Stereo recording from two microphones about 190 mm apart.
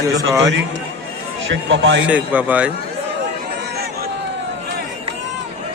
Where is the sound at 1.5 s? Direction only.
75° right (ahead or behind).